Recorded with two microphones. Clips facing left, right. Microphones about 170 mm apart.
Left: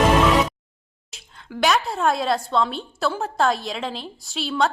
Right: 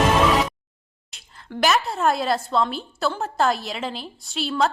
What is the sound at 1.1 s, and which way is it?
A woman's voice, centre (ahead or behind).